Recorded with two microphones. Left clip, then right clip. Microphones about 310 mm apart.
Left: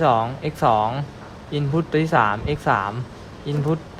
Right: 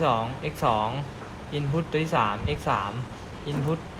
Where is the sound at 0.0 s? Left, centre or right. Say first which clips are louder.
Left 6 dB; left.